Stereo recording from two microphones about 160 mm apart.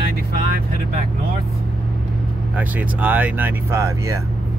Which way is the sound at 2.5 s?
10° right (ahead or behind).